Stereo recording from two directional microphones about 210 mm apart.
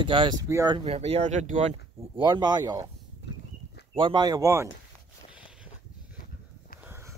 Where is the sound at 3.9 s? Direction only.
25° right (ahead or behind).